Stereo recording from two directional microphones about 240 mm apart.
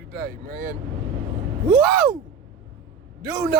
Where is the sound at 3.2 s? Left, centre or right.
Right.